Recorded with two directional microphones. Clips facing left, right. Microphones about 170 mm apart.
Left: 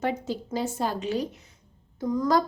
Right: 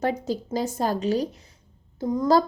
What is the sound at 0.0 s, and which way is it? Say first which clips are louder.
A woman's voice: right 3 dB; 40° right (ahead or behind).